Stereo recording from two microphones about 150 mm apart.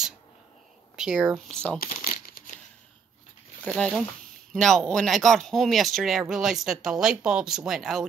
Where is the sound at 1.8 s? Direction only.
70° left (ahead or behind).